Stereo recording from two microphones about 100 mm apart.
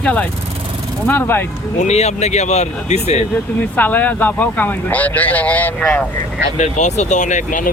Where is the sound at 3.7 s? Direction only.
15° left (ahead or behind).